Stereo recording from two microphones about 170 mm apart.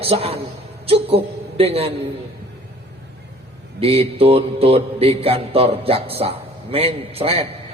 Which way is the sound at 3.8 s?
35° right (ahead or behind).